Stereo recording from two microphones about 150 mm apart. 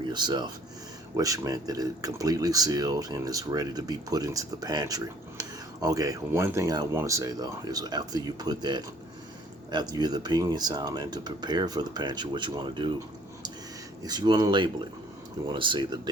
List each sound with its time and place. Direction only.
0.0 s speech: 30° right (ahead or behind)
14.0 s speech: 30° right (ahead or behind)